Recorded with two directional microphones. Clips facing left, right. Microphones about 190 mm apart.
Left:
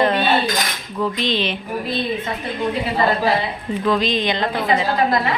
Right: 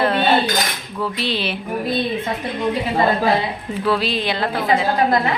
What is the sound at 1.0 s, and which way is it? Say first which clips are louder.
Speech: left 2 dB; 10° right (ahead or behind).